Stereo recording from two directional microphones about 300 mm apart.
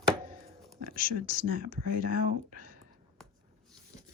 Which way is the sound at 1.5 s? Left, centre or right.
Right.